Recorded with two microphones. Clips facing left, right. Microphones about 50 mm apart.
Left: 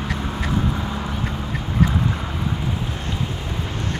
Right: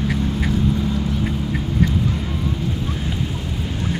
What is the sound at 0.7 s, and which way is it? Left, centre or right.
Duck, left.